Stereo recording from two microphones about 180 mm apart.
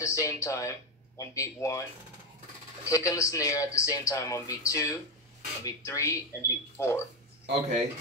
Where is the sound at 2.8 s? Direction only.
15° left (ahead or behind).